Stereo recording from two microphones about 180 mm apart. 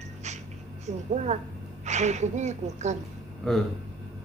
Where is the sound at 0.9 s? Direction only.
40° right (ahead or behind).